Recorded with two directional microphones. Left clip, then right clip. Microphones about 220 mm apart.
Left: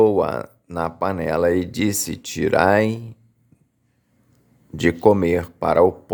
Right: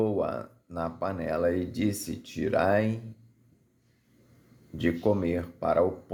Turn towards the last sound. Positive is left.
turn(degrees=35)  # may be behind; listen again after turning